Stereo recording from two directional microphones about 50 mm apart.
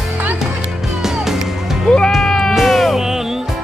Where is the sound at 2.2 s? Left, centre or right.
Centre.